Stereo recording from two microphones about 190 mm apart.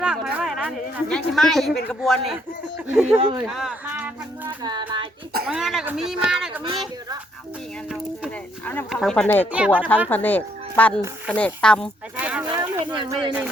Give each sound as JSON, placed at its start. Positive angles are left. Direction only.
{"t": 0.0, "sound": "a sound", "side_deg": -5}
{"t": 1.9, "sound": "speech", "side_deg": 5}
{"t": 3.2, "sound": "child singing", "side_deg": -25}
{"t": 3.4, "sound": "speech", "side_deg": 0}
{"t": 4.6, "sound": "child singing", "side_deg": -25}
{"t": 5.5, "sound": "speech", "side_deg": 0}
{"t": 8.6, "sound": "speech", "side_deg": 10}
{"t": 9.5, "sound": "speech", "side_deg": -5}
{"t": 10.1, "sound": "speech", "side_deg": 10}
{"t": 12.1, "sound": "speech", "side_deg": -5}
{"t": 13.0, "sound": "child singing", "side_deg": -25}